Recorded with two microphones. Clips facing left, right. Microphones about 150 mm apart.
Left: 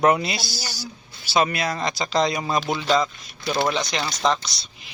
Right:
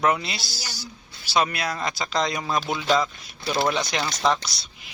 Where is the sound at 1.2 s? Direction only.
Centre (ahead or behind).